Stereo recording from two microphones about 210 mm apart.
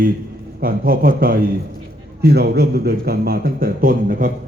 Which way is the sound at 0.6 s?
45° right (ahead or behind).